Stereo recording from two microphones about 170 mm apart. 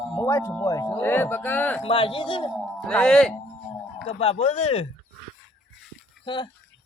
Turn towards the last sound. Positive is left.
turn(degrees=30)  # may be behind; listen again after turning